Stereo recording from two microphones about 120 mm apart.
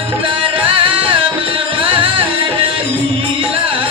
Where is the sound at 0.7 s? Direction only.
45° right (ahead or behind).